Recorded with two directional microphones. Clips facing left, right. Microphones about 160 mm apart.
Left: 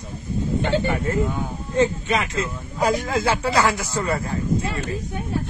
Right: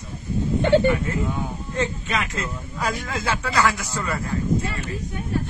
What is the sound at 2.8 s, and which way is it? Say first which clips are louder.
Speech: left 7 dB; 35° left (ahead or behind).